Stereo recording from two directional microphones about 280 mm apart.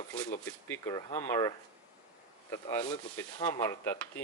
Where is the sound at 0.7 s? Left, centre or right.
Centre.